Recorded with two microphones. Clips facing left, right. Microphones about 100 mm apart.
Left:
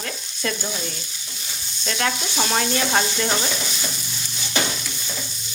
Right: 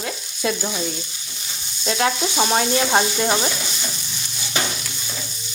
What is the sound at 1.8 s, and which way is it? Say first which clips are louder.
Sizzle: right 4 dB; 15° right (ahead or behind).